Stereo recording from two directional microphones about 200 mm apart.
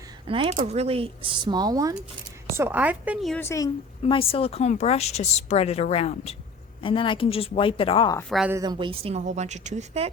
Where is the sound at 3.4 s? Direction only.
15° left (ahead or behind).